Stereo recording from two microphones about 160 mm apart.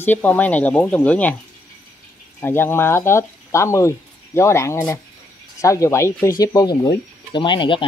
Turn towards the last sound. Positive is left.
turn(degrees=30)  # may be behind; listen again after turning